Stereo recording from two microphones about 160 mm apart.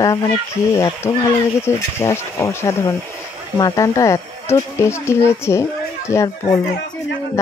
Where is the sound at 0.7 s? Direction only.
20° left (ahead or behind).